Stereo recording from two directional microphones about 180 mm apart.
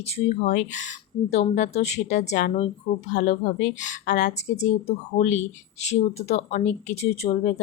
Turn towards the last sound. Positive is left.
turn(degrees=35)  # may be behind; listen again after turning